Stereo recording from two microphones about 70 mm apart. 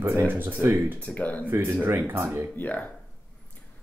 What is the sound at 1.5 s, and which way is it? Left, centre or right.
Speech, right.